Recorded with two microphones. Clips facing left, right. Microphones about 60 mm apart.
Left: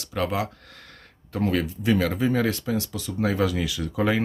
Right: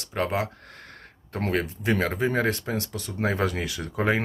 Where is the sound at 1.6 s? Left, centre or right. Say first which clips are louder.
Left 2 dB; right.